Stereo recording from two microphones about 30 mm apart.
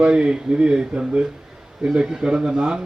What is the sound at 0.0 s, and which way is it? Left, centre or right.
A man's voice, right.